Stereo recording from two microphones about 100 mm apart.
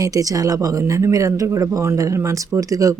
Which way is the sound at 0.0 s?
35° right (ahead or behind).